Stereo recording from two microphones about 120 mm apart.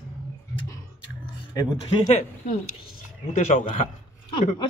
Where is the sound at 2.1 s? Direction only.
85° left.